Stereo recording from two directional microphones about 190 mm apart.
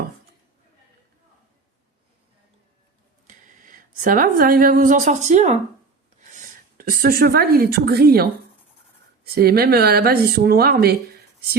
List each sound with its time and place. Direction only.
3.2 s speech: 40° right (ahead or behind)